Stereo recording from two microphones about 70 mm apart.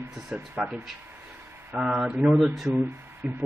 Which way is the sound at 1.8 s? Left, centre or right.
Centre.